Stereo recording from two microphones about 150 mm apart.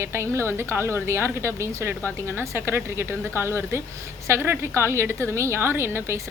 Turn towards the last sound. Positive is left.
turn(degrees=-15)  # may be behind; listen again after turning